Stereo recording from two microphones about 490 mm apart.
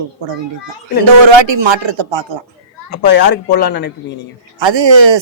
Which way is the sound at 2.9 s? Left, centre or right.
Left.